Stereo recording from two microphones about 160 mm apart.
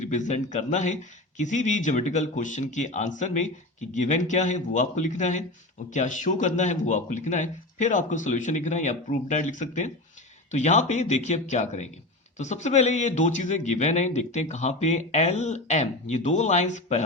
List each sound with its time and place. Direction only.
0.0 s a man's voice: 50° left (ahead or behind)